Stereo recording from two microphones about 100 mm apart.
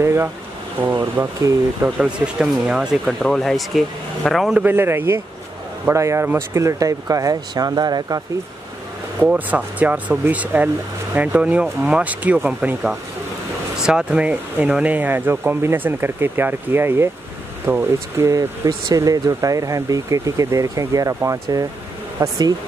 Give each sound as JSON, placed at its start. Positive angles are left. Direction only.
{"t": 0.0, "sound": "speech", "side_deg": -25}
{"t": 2.0, "sound": "speech", "side_deg": -10}
{"t": 4.6, "sound": "speech", "side_deg": -20}
{"t": 9.2, "sound": "speech", "side_deg": -15}